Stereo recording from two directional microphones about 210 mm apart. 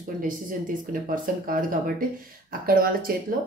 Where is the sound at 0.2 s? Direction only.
40° right (ahead or behind).